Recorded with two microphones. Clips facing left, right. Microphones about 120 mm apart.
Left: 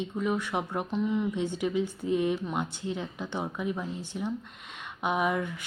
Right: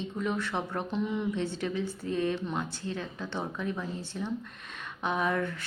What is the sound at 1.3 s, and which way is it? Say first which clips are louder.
Speech: left 2 dB; 15° left (ahead or behind).